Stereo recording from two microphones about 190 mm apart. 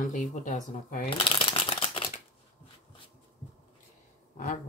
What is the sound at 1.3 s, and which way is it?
Crumpling, 30° left (ahead or behind).